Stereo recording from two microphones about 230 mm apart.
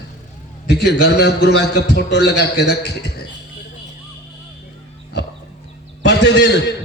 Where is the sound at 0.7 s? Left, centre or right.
Left.